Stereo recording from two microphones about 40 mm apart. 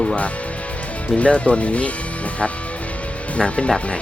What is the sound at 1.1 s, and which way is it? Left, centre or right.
Speech, left.